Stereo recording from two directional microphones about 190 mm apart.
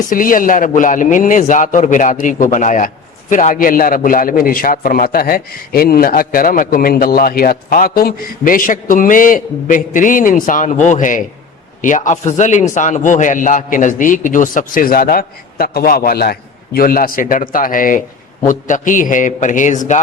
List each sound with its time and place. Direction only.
0.1 s a man's voice: 45° left (ahead or behind)